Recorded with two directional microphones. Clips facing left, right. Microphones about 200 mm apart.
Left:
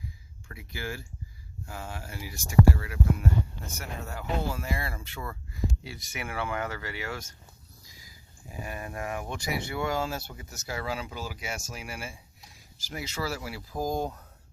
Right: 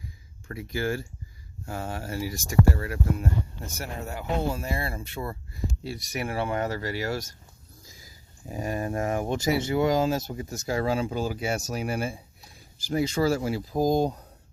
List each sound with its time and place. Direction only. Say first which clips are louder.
0.4 s speech: right 9 dB; 45° right (ahead or behind)
4.0 s speech: right 4 dB; 20° right (ahead or behind); by 9.9 s 35° right (ahead or behind)
9.9 s speech: right 7 dB; 20° right (ahead or behind)
13.6 s speech: right 7 dB; 20° right (ahead or behind)
13.8 s speech: right 7 dB; 35° right (ahead or behind)